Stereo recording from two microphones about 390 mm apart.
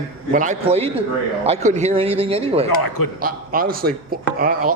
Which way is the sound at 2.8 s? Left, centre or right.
Left.